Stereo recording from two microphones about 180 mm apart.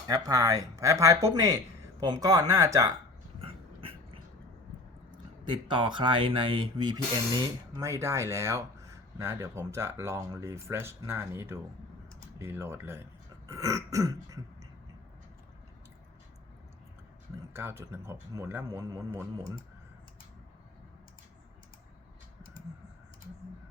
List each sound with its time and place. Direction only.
0.1 s speech: 20° right (ahead or behind)
3.4 s dog: 30° right (ahead or behind)
5.5 s speech: 25° right (ahead or behind)
17.5 s speech: 10° right (ahead or behind)